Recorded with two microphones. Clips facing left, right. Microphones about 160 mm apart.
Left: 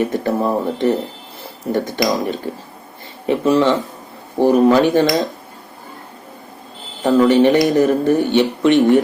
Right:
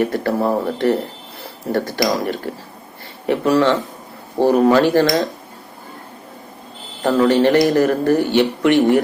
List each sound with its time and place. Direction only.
0.0 s speech: 20° left (ahead or behind)
7.3 s speech: 15° left (ahead or behind)